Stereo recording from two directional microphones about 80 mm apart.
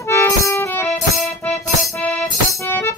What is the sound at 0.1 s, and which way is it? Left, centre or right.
Music, left.